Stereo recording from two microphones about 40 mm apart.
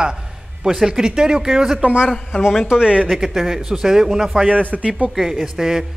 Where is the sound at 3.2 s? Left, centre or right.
Centre.